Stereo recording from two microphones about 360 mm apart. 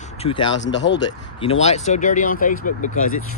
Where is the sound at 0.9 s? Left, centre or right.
Centre.